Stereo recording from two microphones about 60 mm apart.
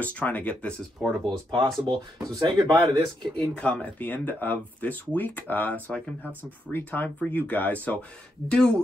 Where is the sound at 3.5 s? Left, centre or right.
Left.